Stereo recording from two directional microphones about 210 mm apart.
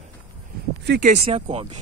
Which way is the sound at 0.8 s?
50° right (ahead or behind).